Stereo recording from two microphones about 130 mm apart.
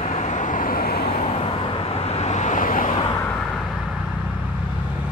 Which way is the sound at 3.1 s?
15° left (ahead or behind).